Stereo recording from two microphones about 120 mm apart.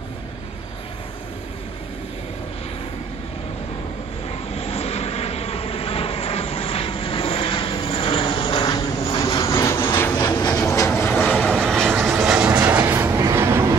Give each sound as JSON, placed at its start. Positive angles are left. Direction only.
{"t": 4.6, "sound": "vehicle", "side_deg": 60}
{"t": 9.9, "sound": "train", "side_deg": 20}
{"t": 10.2, "sound": "train", "side_deg": 30}
{"t": 10.9, "sound": "vehicle", "side_deg": 15}
{"t": 11.7, "sound": "vehicle", "side_deg": 0}
{"t": 13.2, "sound": "train", "side_deg": -20}